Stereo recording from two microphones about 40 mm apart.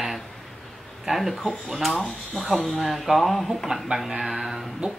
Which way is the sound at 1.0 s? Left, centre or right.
Centre.